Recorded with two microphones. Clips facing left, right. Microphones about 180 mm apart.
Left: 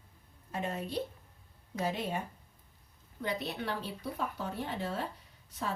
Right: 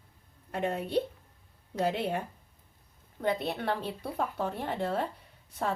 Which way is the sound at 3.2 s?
55° right (ahead or behind).